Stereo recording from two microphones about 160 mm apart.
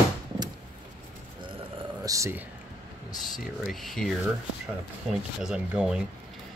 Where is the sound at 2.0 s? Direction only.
20° right (ahead or behind).